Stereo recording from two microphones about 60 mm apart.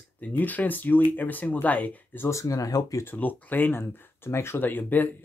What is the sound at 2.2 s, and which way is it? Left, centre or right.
Speech, left.